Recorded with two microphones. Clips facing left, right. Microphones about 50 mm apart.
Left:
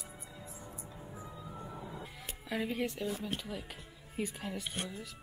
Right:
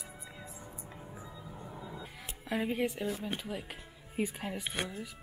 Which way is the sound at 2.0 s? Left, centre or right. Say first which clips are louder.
Even; centre.